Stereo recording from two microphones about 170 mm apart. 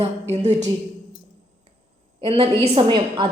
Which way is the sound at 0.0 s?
40° right (ahead or behind).